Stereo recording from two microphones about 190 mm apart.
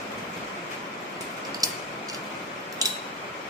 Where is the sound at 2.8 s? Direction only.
20° right (ahead or behind).